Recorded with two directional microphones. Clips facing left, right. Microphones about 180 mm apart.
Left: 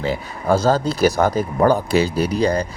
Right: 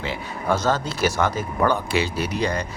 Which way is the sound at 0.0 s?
40° left (ahead or behind).